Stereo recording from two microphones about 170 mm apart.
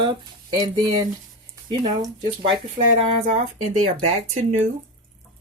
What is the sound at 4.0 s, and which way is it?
Speech, 40° right (ahead or behind).